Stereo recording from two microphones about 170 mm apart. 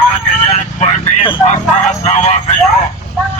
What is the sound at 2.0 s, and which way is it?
Speech, 40° left (ahead or behind).